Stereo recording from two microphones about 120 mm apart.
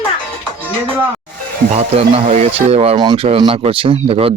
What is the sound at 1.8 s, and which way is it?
Speech, 60° right (ahead or behind).